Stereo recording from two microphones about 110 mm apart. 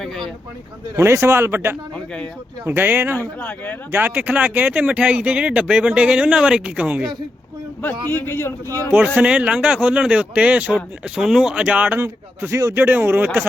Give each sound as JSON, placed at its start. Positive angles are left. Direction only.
{"t": 0.9, "sound": "a man's voice", "side_deg": -25}
{"t": 3.2, "sound": "speech", "side_deg": 15}
{"t": 3.9, "sound": "speech", "side_deg": -15}
{"t": 8.1, "sound": "a man's voice", "side_deg": 20}
{"t": 9.1, "sound": "speech", "side_deg": -10}
{"t": 11.9, "sound": "a man's voice", "side_deg": -25}